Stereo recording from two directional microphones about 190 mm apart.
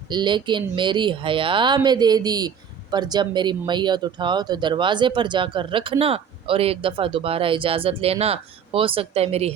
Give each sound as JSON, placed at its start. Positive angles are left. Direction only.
{"t": 0.1, "sound": "speech", "side_deg": -25}